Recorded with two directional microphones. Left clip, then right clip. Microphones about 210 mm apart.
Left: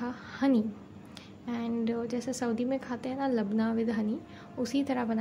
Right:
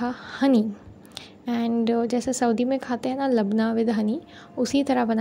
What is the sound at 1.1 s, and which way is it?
A woman's voice, 35° right (ahead or behind).